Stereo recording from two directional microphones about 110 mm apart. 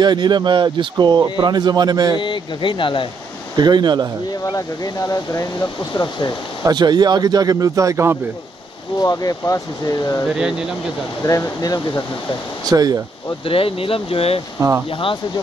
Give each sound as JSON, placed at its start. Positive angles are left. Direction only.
{"t": 0.0, "sound": "speech", "side_deg": -40}
{"t": 2.1, "sound": "speech", "side_deg": 50}
{"t": 3.5, "sound": "speech", "side_deg": -40}
{"t": 4.4, "sound": "speech", "side_deg": 35}
{"t": 6.6, "sound": "speech", "side_deg": -40}
{"t": 9.0, "sound": "speech", "side_deg": 35}
{"t": 11.2, "sound": "speech", "side_deg": 30}
{"t": 12.6, "sound": "speech", "side_deg": -35}
{"t": 13.5, "sound": "speech", "side_deg": 55}